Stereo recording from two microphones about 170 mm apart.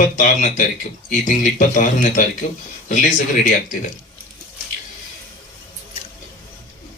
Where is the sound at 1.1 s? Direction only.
50° left (ahead or behind).